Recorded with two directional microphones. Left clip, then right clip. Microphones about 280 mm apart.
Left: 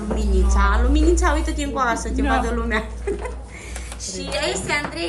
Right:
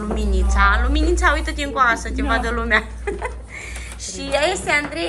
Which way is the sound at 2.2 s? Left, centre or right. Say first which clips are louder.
Even; centre.